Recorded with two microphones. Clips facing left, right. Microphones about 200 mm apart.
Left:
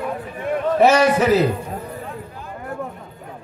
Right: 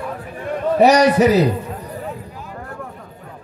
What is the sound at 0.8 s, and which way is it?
Speech, 40° right (ahead or behind).